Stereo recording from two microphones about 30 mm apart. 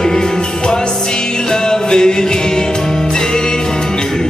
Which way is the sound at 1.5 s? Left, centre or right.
Left.